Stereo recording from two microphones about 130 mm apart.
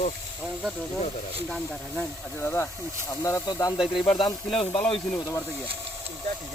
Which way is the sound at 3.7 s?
Centre (ahead or behind).